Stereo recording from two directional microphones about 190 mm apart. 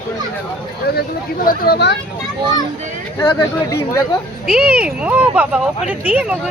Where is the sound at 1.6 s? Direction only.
60° left (ahead or behind).